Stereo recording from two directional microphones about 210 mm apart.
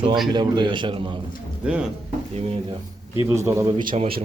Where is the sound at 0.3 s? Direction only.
20° right (ahead or behind).